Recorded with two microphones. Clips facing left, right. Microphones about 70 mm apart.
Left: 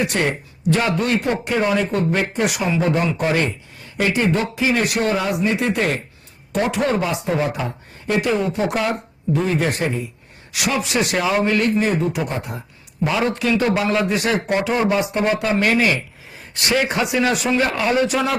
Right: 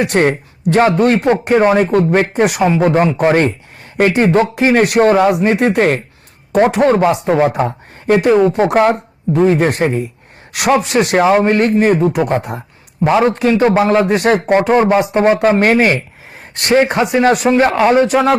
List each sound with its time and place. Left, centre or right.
0.0 s a man's voice: right
13.0 s a man's voice: right